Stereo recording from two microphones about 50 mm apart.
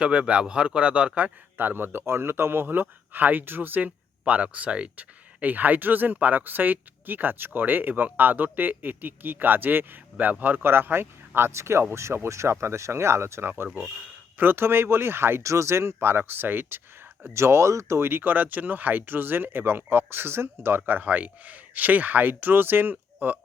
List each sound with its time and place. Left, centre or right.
0.0 s speech: right
1.5 s speech: right
3.1 s speech: right
4.3 s speech: right
11.3 s speech: right
14.3 s speech: right
15.4 s speech: right
17.2 s speech: right
18.2 s speech: right